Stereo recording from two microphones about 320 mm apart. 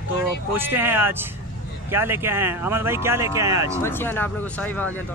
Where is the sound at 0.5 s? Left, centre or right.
Centre.